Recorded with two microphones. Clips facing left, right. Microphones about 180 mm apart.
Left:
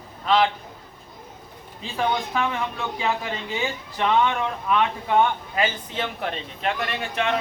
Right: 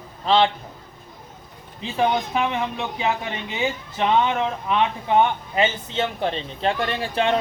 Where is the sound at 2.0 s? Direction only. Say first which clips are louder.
Right 3 dB; 20° right (ahead or behind).